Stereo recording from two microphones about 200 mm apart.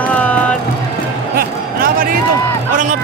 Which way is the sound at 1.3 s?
45° right (ahead or behind).